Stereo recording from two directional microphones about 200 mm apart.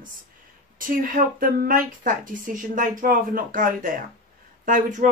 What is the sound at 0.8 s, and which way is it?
A child's voice, 45° right (ahead or behind).